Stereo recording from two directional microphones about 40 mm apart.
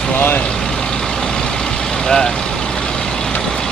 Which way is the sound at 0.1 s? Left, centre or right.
Left.